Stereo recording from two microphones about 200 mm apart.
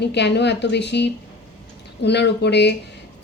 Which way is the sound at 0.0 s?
60° left (ahead or behind).